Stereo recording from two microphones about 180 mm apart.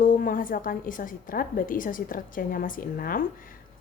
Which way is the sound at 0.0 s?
50° left (ahead or behind).